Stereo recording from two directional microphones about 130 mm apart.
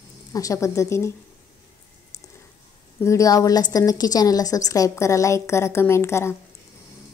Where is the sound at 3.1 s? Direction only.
25° left (ahead or behind).